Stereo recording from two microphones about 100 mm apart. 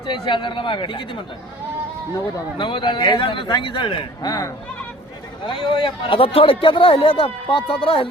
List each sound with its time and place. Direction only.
0.1 s a man's voice: 55° left (ahead or behind)
2.6 s a man's voice: 55° left (ahead or behind)
4.3 s speech: 35° left (ahead or behind)
5.5 s a man's voice: 60° left (ahead or behind)